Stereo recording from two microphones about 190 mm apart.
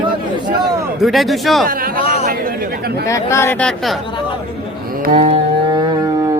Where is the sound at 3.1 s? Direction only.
15° left (ahead or behind).